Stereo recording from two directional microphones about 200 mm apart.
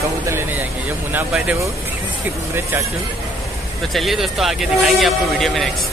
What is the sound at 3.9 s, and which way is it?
Speech, centre (ahead or behind).